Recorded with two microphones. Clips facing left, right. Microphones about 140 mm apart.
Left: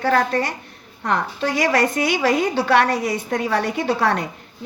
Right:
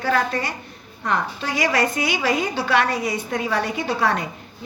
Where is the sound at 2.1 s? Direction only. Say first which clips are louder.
Left 3 dB; 45° left (ahead or behind).